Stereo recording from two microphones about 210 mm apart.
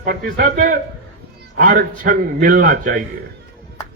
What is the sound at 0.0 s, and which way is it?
A man's voice, 45° right (ahead or behind).